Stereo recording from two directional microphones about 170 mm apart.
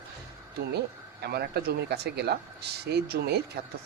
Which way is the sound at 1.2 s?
70° right (ahead or behind).